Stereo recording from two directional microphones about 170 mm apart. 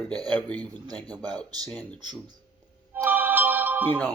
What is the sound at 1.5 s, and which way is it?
Speech, 20° right (ahead or behind).